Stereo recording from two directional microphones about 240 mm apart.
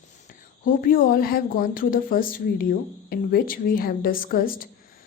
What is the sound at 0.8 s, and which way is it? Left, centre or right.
A woman's voice, left.